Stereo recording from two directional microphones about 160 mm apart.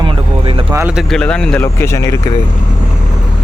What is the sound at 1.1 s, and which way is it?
Speech, 5° left (ahead or behind).